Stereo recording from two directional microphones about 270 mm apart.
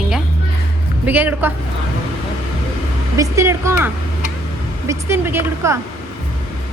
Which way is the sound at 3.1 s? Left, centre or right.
Centre.